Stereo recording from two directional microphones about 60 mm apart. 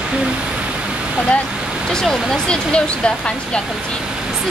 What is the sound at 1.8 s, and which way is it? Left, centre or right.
Speech, centre.